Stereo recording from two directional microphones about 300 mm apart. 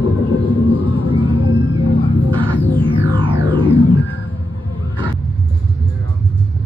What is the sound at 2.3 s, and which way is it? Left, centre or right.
Throbbing, centre.